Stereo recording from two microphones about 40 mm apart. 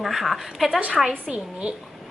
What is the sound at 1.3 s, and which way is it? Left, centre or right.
Speech, right.